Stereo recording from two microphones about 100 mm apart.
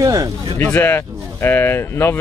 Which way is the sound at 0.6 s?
15° left (ahead or behind).